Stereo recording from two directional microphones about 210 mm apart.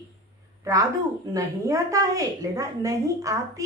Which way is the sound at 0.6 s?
15° right (ahead or behind).